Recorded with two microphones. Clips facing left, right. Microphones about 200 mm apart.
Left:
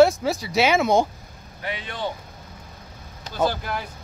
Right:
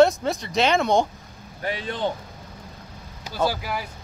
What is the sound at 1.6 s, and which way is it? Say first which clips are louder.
Speech: right 3 dB; 40° right (ahead or behind).